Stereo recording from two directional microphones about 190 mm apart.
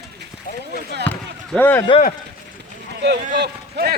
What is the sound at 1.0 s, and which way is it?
Speech, 10° left (ahead or behind).